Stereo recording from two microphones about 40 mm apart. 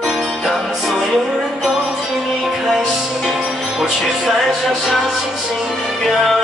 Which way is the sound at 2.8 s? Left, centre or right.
Centre.